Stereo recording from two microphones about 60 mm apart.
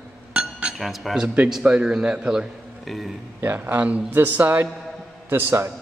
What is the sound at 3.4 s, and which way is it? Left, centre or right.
A man's voice, right.